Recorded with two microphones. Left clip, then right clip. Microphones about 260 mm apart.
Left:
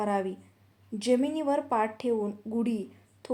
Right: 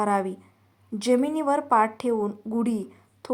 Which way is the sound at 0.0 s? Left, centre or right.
Centre.